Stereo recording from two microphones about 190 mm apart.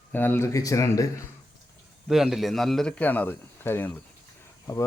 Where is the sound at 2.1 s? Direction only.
Centre (ahead or behind).